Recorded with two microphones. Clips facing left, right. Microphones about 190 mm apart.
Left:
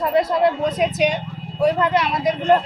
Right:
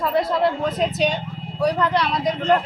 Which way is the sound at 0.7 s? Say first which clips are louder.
Left 2 dB; centre (ahead or behind).